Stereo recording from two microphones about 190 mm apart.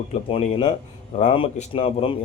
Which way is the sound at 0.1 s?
30° left (ahead or behind).